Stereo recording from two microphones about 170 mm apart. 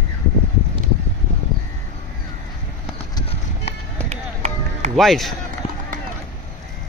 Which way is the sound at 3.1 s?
35° left (ahead or behind).